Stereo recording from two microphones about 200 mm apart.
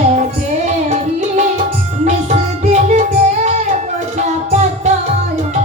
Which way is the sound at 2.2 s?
35° right (ahead or behind).